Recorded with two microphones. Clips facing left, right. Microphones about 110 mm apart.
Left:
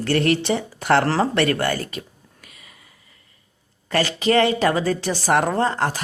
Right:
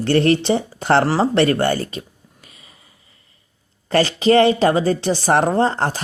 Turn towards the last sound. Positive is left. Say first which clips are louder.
# right 3 dB
turn(degrees=-30)  # may be behind; listen again after turning